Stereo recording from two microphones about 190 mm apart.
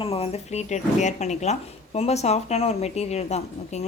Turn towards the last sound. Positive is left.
turn(degrees=35)  # may be behind; listen again after turning